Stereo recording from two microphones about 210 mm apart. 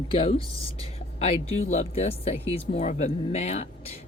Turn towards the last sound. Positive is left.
turn(degrees=30)  # may be behind; listen again after turning